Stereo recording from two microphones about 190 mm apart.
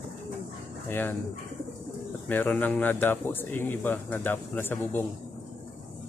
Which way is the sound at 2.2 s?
10° left (ahead or behind).